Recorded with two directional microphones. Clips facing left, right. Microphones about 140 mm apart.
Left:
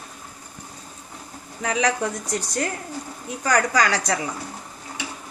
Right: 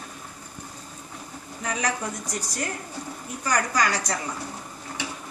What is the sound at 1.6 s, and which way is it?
A woman's voice, 70° left (ahead or behind).